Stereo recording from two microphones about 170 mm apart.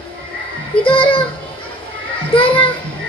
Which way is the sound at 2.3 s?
30° left (ahead or behind).